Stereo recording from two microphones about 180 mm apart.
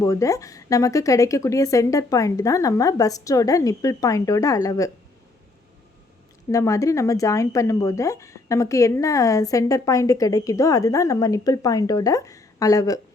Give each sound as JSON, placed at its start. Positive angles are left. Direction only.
{"t": 0.0, "sound": "speech", "side_deg": 15}
{"t": 6.5, "sound": "speech", "side_deg": 15}